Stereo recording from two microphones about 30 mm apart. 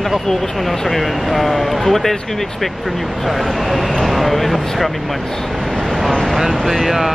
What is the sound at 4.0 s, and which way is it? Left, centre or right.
Speech, centre.